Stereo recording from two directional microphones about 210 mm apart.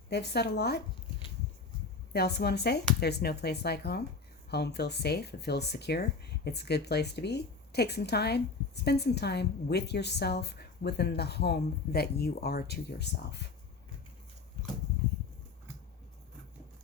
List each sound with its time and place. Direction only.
0.1 s speech: 50° left (ahead or behind)
2.1 s speech: 50° left (ahead or behind)